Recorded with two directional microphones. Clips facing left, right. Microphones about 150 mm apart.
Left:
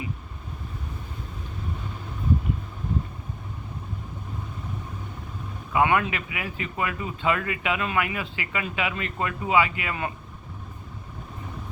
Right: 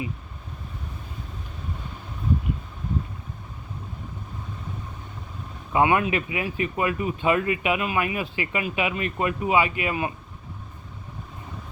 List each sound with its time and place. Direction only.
5.7 s speech: 20° right (ahead or behind)